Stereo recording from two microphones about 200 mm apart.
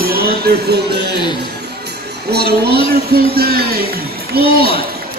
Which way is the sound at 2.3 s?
50° right (ahead or behind).